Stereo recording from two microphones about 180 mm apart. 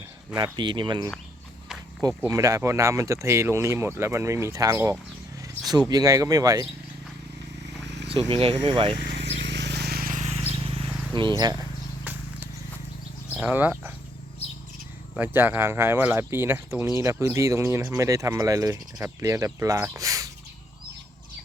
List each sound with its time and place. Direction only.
0.3 s speech: 20° right (ahead or behind)
8.3 s speech: 30° right (ahead or behind)
9.3 s a sound: 75° right (ahead or behind); by 11.5 s 25° right (ahead or behind)
13.3 s speech: 10° right (ahead or behind)
15.1 s speech: 10° right (ahead or behind)